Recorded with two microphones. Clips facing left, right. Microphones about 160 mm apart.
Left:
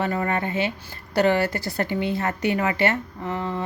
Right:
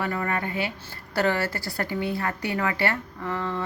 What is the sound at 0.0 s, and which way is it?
A woman's voice, 25° left (ahead or behind).